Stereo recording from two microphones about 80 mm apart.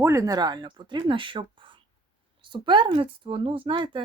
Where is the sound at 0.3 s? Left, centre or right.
Right.